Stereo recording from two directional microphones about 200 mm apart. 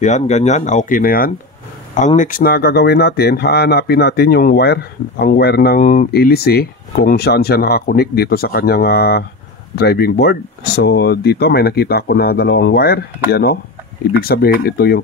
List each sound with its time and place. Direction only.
0.0 s speech: 35° left (ahead or behind); by 15.0 s 50° left (ahead or behind)